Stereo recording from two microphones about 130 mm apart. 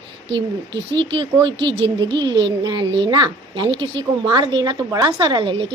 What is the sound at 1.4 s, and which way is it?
Speech, 35° right (ahead or behind).